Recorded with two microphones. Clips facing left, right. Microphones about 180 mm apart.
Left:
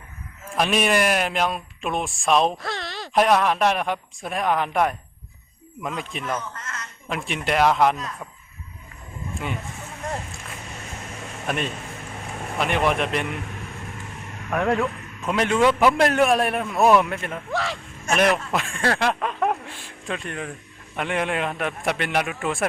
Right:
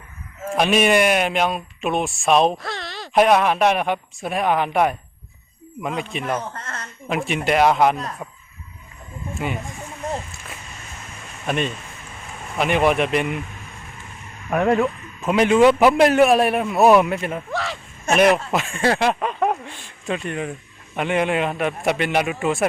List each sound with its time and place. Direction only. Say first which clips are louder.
0.5 s speech: right 4 dB; centre (ahead or behind)
5.9 s speech: right 5 dB; 65° right (ahead or behind)
6.5 s speech: right 3 dB; 30° right (ahead or behind)
7.1 s speech: right 5 dB; 5° right (ahead or behind)
11.4 s speech: right 4 dB; centre (ahead or behind)
14.5 s speech: right 4 dB; 5° right (ahead or behind)
18.1 s a man's voice: right 4 dB; 25° right (ahead or behind)
18.5 s speech: right 4 dB; centre (ahead or behind)